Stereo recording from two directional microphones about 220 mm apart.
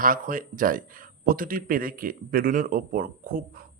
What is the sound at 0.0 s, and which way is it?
Speech, 40° right (ahead or behind).